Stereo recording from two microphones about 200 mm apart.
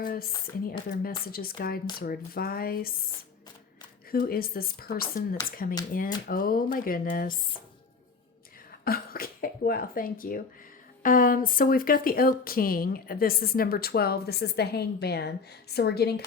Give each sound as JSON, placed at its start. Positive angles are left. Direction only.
{"t": 0.0, "sound": "speech", "side_deg": 45}
{"t": 4.1, "sound": "speech", "side_deg": 50}
{"t": 8.8, "sound": "speech", "side_deg": 50}